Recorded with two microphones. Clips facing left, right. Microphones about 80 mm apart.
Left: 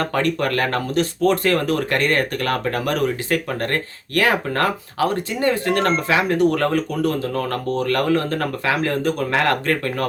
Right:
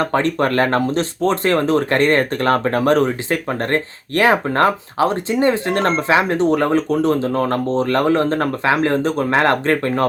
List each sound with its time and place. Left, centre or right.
0.0 s speech: right